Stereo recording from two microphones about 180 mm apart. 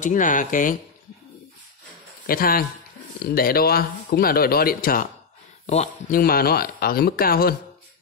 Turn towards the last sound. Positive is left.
turn(degrees=55)  # may be behind; listen again after turning